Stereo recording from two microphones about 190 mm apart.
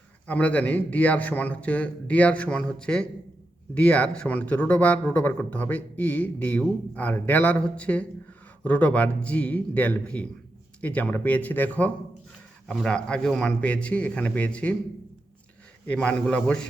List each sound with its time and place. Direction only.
0.3 s a man's voice: 5° left (ahead or behind)
15.9 s a man's voice: 5° left (ahead or behind)